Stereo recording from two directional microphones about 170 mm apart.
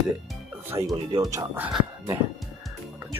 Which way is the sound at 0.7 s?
20° right (ahead or behind).